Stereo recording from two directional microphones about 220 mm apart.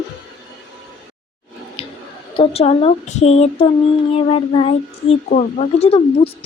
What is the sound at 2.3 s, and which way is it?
Speech, 25° left (ahead or behind).